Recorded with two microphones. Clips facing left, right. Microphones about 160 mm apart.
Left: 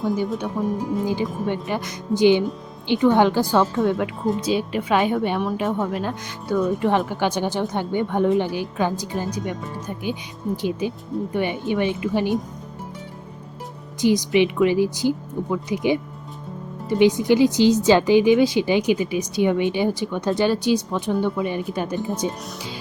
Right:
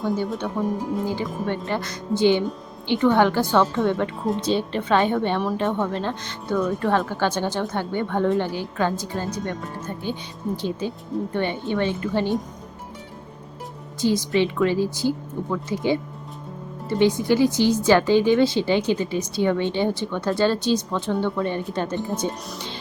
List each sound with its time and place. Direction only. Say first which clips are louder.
0.3 s speech: left 1 dB; 5° left (ahead or behind)
14.0 s speech: left 3 dB; 15° left (ahead or behind)